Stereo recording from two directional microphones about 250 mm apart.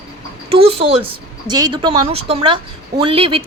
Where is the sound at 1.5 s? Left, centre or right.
Centre.